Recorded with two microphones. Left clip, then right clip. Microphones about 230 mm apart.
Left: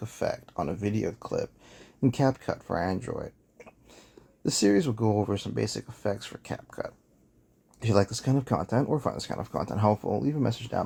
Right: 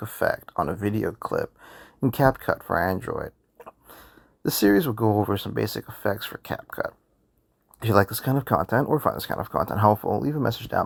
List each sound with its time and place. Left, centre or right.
0.0 s speech: centre